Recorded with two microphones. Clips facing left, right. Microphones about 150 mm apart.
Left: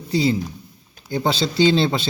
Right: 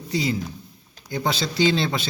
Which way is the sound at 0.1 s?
30° left (ahead or behind).